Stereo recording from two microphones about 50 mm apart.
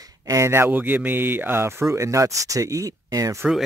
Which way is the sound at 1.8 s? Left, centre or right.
Right.